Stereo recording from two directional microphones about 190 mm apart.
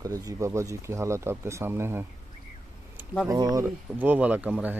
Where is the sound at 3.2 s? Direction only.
20° right (ahead or behind).